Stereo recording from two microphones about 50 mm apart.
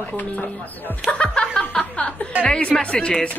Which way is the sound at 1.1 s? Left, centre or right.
Centre.